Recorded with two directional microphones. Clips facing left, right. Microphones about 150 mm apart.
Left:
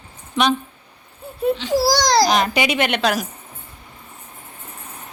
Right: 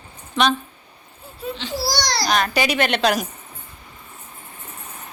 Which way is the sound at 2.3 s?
20° left (ahead or behind).